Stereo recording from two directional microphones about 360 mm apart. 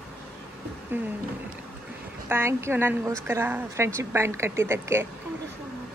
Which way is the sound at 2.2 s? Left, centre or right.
Centre.